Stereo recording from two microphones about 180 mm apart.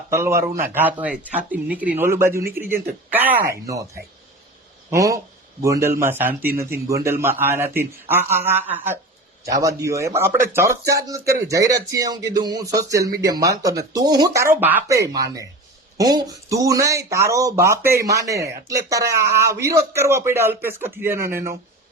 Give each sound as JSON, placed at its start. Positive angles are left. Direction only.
{"t": 0.1, "sound": "speech", "side_deg": -15}